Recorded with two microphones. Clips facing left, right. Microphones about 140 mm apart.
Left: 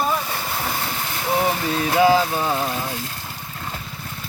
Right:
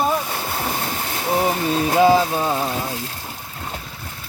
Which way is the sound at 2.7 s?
25° right (ahead or behind).